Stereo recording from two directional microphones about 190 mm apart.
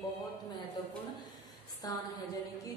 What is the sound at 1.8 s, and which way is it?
Speech, 20° left (ahead or behind).